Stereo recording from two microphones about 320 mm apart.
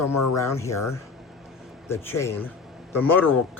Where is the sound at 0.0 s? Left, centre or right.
Left.